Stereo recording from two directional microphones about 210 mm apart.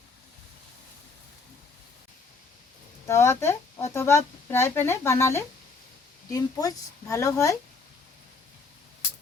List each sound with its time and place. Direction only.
3.1 s speech: 10° left (ahead or behind)